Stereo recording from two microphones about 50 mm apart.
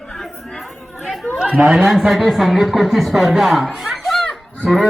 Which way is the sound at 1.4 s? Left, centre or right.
Centre.